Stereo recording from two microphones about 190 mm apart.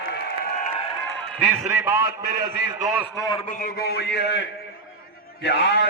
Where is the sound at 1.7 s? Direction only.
10° right (ahead or behind).